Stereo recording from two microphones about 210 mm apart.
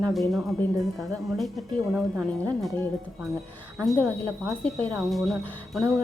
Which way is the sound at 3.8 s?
Centre (ahead or behind).